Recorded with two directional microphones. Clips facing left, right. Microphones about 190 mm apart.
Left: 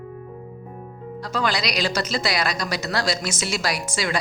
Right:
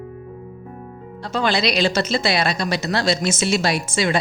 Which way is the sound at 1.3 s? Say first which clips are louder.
Right 5 dB; 25° right (ahead or behind).